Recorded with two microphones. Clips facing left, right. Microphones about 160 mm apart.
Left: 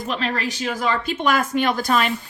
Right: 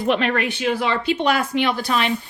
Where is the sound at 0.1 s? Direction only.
35° left (ahead or behind).